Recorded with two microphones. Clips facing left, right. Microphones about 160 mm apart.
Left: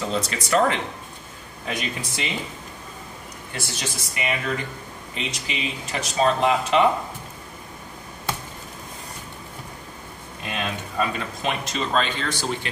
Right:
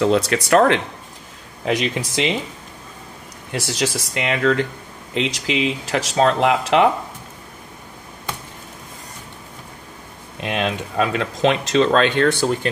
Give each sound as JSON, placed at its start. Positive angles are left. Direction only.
{"t": 0.0, "sound": "speech", "side_deg": -70}
{"t": 1.7, "sound": "speech", "side_deg": -90}
{"t": 3.5, "sound": "speech", "side_deg": -85}
{"t": 10.4, "sound": "speech", "side_deg": -80}